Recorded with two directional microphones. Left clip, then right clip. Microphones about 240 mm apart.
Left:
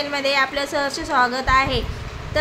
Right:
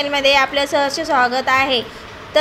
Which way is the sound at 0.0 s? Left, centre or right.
Centre.